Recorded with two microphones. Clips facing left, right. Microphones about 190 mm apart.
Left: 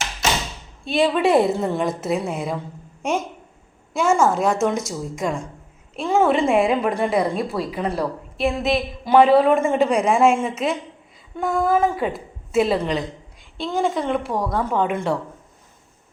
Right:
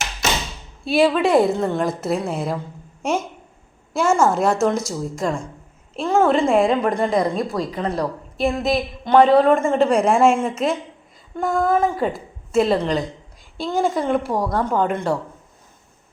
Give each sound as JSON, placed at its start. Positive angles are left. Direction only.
{"t": 0.9, "sound": "a woman's voice", "side_deg": 0}
{"t": 3.9, "sound": "a woman's voice", "side_deg": -5}
{"t": 4.8, "sound": "a woman's voice", "side_deg": 20}
{"t": 6.0, "sound": "a woman's voice", "side_deg": 5}